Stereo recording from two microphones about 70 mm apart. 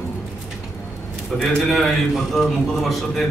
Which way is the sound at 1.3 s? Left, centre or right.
Centre.